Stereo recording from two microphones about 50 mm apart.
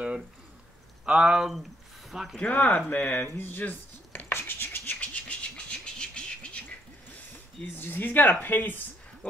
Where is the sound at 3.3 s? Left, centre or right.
Left.